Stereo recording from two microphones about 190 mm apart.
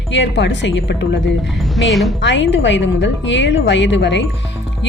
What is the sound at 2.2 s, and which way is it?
Speech, 70° left (ahead or behind).